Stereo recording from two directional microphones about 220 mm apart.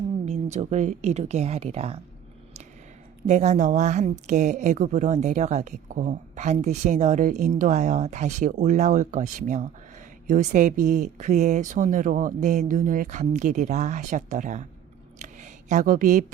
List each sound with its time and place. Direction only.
0.3 s speech: 30° right (ahead or behind)
3.2 s a woman's voice: 30° right (ahead or behind)
15.2 s a sound: 35° right (ahead or behind)